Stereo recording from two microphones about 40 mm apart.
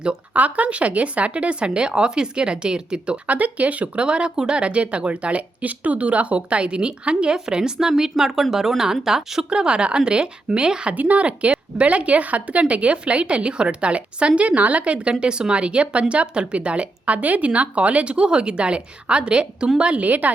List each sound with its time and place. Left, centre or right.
0.3 s speech: right
3.2 s a woman's voice: right
4.0 s speech: right
9.5 s speech: right
10.9 s a woman's voice: right
20.1 s a woman's voice: right